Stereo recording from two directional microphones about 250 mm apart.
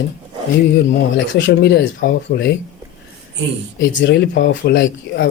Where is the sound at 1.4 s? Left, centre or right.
Left.